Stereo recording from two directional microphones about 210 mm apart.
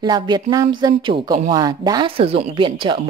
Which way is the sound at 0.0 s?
20° right (ahead or behind).